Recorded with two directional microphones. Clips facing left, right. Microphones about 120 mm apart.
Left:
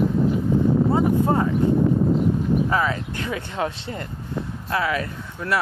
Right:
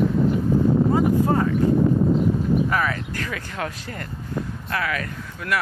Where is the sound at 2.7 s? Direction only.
25° left (ahead or behind).